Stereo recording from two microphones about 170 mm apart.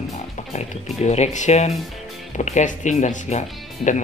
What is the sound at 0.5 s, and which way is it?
Speech, 40° left (ahead or behind).